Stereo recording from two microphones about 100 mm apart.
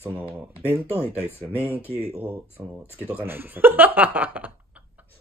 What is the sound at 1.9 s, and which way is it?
Speech, 85° right.